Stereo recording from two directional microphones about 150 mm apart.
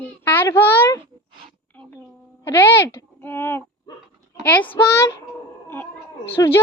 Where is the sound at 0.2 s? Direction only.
15° left (ahead or behind).